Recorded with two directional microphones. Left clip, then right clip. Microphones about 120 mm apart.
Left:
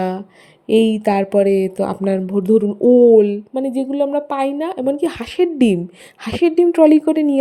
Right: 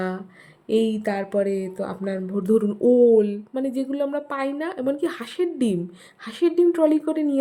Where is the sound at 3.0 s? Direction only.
35° left (ahead or behind).